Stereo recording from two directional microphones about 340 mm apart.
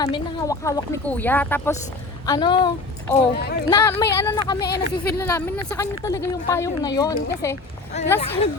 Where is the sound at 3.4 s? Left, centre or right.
Left.